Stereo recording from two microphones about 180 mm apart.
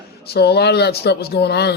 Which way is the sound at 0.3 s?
65° left (ahead or behind).